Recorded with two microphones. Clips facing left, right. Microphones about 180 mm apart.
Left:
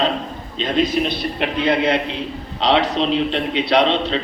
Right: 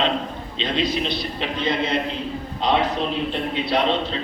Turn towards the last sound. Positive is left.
turn(degrees=80)